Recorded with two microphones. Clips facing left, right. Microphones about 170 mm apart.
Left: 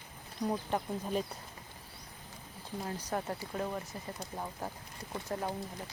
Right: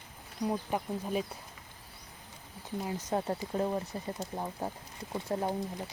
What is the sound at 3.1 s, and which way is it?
Speech, 30° right (ahead or behind).